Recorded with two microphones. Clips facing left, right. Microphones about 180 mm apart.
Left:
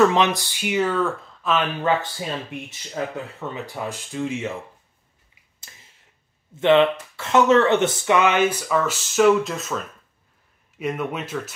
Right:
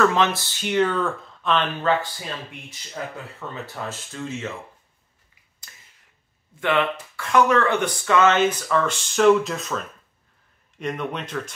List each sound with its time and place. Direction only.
0.0 s speech: 20° left (ahead or behind)
3.3 s speech: 15° left (ahead or behind)
5.7 s finger snapping: 25° left (ahead or behind)
6.5 s speech: 25° left (ahead or behind); by 11.5 s 5° left (ahead or behind)